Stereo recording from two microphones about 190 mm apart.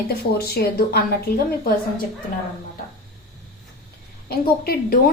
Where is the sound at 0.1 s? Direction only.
55° left (ahead or behind).